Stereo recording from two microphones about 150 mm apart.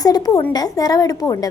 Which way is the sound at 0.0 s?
25° left (ahead or behind).